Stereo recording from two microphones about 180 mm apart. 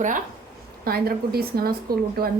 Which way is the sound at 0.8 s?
60° right (ahead or behind).